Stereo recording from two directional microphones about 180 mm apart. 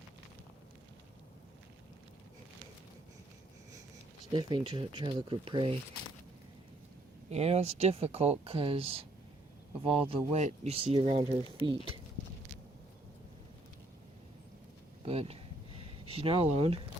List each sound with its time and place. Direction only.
4.3 s speech: 25° right (ahead or behind)
7.3 s speech: 35° right (ahead or behind)
15.0 s speech: 35° right (ahead or behind)